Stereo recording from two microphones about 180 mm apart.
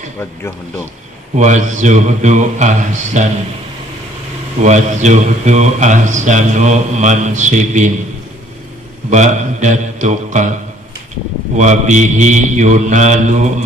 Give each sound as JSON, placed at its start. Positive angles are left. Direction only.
{"t": 1.4, "sound": "mantra", "side_deg": -40}
{"t": 4.6, "sound": "a man's voice", "side_deg": -40}
{"t": 9.0, "sound": "a man's voice", "side_deg": -40}
{"t": 11.5, "sound": "mantra", "side_deg": -40}